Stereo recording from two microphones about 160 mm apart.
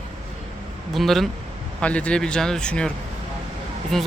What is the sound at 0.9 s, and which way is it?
Speech, centre (ahead or behind).